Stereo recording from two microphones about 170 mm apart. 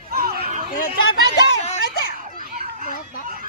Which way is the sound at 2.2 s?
55° right (ahead or behind).